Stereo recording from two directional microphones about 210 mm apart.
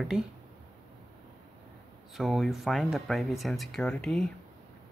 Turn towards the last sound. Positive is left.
turn(degrees=5)  # may be behind; listen again after turning